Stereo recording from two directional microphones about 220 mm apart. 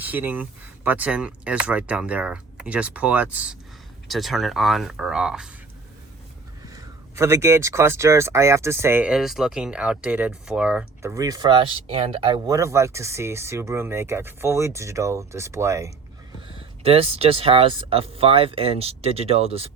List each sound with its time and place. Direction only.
0.0 s speech: 10° right (ahead or behind)
6.7 s speech: 10° right (ahead or behind)
16.6 s speech: 25° right (ahead or behind)